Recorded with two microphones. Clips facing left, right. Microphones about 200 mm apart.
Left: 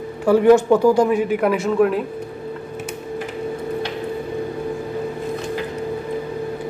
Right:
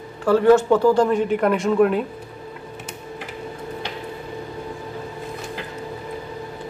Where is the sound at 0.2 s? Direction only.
15° left (ahead or behind).